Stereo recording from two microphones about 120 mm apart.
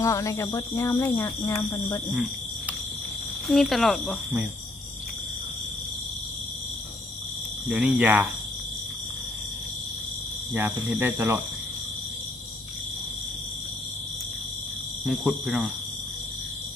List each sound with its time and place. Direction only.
0.0 s speech: 25° left (ahead or behind)
3.4 s speech: centre (ahead or behind)
7.7 s cricket: 10° right (ahead or behind)
10.5 s cricket: 15° right (ahead or behind)
15.0 s speech: 5° right (ahead or behind)